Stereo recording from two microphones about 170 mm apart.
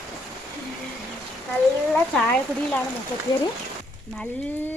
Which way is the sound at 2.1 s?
5° left (ahead or behind).